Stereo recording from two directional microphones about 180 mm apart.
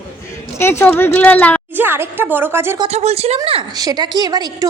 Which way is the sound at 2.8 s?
35° right (ahead or behind).